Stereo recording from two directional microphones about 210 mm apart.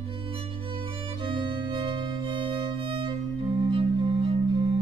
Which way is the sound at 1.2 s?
25° right (ahead or behind).